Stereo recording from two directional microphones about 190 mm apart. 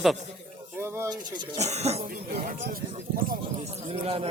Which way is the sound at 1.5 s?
35° right (ahead or behind).